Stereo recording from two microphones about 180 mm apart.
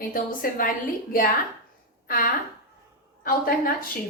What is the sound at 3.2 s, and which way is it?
Speech, 55° left (ahead or behind).